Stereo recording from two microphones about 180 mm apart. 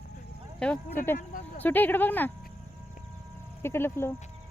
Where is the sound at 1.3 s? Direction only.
40° left (ahead or behind).